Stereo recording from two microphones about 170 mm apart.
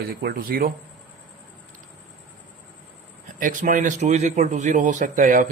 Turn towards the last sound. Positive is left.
turn(degrees=-50)  # may be behind; listen again after turning